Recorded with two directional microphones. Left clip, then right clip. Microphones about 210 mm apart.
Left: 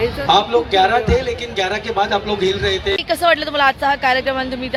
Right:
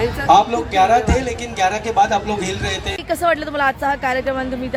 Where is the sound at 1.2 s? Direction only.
55° right (ahead or behind).